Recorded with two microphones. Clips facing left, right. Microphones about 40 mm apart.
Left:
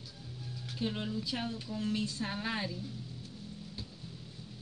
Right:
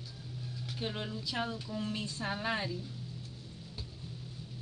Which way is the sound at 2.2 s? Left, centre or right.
Centre.